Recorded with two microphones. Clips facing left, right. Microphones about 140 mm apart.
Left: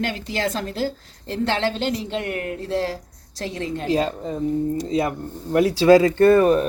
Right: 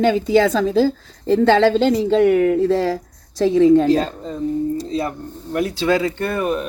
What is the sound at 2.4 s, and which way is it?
Speech, 90° right.